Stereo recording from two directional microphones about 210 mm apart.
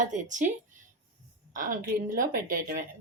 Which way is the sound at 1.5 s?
40° right (ahead or behind).